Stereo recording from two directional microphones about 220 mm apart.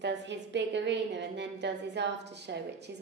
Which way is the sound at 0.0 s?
50° right (ahead or behind).